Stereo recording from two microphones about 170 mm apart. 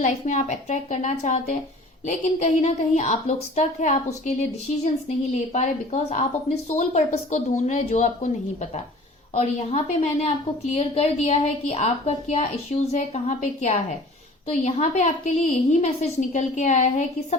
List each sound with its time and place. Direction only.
0.0 s a woman's voice: 45° left (ahead or behind)
5.5 s a woman's voice: 40° left (ahead or behind)
9.3 s a woman's voice: 40° left (ahead or behind)